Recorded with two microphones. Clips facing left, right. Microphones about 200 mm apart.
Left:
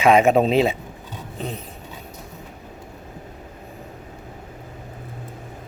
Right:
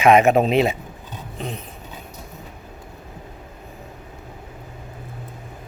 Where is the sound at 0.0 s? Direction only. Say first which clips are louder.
Right 1 dB; 30° left (ahead or behind).